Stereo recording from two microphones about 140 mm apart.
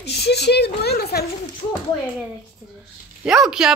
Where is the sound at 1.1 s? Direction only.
90° left.